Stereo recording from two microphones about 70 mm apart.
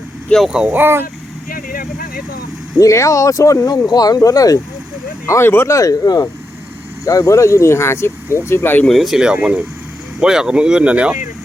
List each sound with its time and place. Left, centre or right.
0.4 s speech: centre
0.7 s speech: right
2.7 s speech: left
5.2 s speech: left
5.7 s speech: left
8.9 s speech: centre